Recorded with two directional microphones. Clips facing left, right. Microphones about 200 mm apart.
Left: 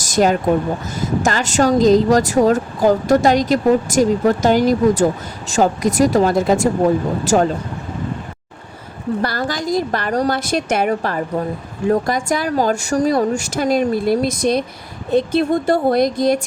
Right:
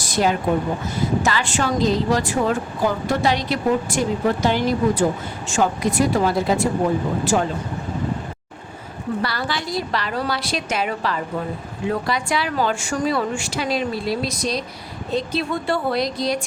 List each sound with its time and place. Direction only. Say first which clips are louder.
0.0 s a woman's voice: left 5 dB; 45° left (ahead or behind)
9.2 s speech: left 5 dB; 45° left (ahead or behind)